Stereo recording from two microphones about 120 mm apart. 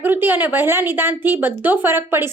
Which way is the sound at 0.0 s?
15° right (ahead or behind).